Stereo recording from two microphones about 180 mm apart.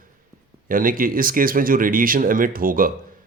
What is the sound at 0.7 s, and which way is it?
Speech, 50° right (ahead or behind).